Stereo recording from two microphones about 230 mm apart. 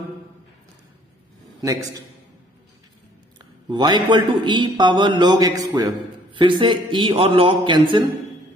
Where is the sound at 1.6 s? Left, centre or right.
Centre.